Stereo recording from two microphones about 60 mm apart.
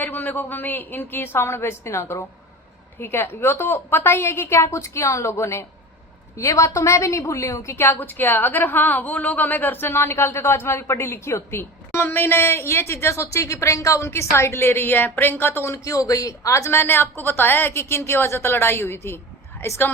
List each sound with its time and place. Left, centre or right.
0.0 s a woman's voice: left
3.0 s a woman's voice: left
7.9 s a woman's voice: left
13.2 s a woman's voice: left
14.1 s a woman's voice: left
15.7 s a woman's voice: left